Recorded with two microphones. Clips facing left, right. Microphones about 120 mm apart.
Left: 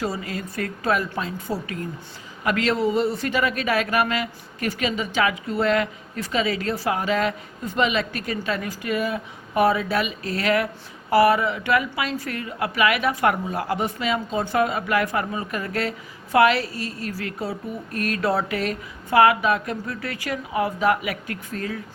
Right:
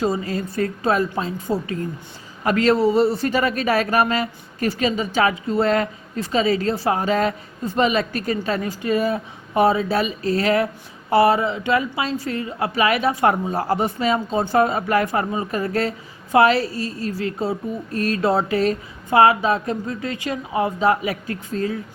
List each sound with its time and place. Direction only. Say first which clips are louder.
0.0 s a woman's voice: right 6 dB; 30° right (ahead or behind)